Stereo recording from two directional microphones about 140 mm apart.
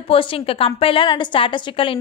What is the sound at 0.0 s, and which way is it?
A woman's voice, 40° left (ahead or behind).